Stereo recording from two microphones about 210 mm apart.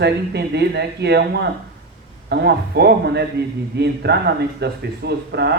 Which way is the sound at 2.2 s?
50° right (ahead or behind).